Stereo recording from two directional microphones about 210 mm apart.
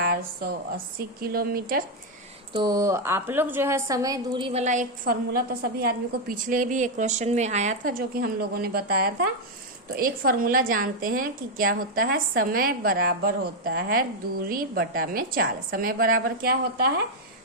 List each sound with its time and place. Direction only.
0.0 s a woman's voice: 45° right (ahead or behind)
2.5 s a woman's voice: 20° right (ahead or behind); by 5.1 s 35° right (ahead or behind)
6.2 s a woman's voice: 40° right (ahead or behind)